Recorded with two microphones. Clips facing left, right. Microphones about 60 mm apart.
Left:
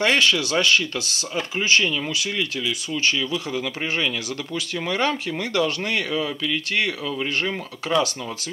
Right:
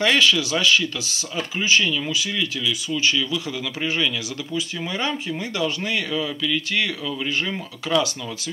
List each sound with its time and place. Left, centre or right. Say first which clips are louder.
0.0 s speech: right 1 dB; left
4.6 s speech: left 3 dB; left
6.1 s speech: even; left